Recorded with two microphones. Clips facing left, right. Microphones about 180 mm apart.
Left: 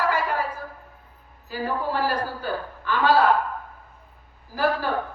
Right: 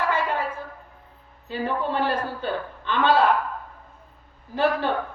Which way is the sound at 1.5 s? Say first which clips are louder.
Right 1 dB; 25° right (ahead or behind).